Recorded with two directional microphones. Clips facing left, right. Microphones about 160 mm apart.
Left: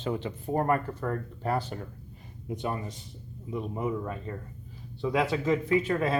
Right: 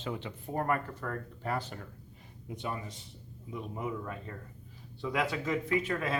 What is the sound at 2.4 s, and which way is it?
Speech, 45° left (ahead or behind).